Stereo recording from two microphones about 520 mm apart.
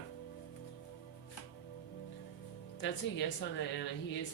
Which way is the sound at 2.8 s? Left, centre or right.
Left.